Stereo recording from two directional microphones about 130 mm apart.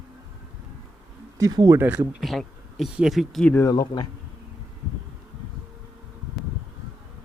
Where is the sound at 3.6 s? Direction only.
30° left (ahead or behind).